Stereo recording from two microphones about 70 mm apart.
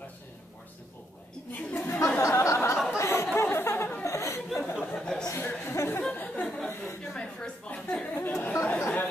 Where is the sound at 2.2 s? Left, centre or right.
Left.